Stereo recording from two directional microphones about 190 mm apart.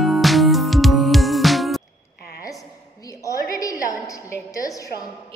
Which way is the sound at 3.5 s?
15° left (ahead or behind).